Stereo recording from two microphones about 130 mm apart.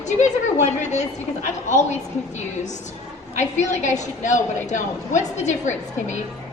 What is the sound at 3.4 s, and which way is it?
A woman's voice, 65° left (ahead or behind).